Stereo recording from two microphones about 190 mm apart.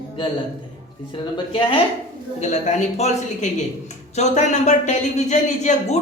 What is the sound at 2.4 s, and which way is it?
Speech, 40° left (ahead or behind).